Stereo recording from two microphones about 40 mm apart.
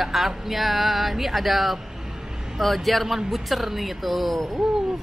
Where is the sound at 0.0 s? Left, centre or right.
Centre.